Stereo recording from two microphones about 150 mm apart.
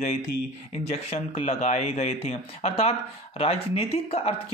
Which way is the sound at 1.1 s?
45° left (ahead or behind).